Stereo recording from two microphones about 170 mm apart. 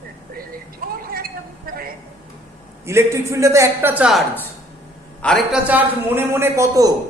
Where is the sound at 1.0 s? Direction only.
60° right (ahead or behind).